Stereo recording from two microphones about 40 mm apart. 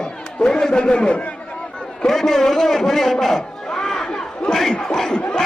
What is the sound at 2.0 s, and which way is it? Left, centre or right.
A man's voice, centre.